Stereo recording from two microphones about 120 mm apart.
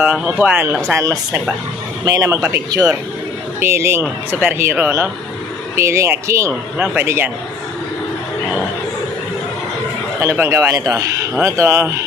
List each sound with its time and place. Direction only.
0.0 s speech: 10° right (ahead or behind)
6.8 s speech: 10° right (ahead or behind)
10.2 s speech: 20° right (ahead or behind)